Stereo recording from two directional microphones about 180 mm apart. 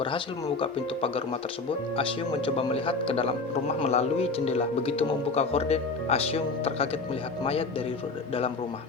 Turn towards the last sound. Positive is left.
turn(degrees=35)  # may be behind; listen again after turning